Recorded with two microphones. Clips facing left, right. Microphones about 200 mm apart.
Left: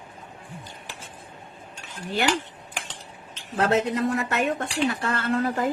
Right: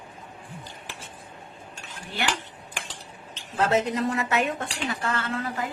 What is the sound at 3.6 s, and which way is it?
A woman's voice, 60° left (ahead or behind).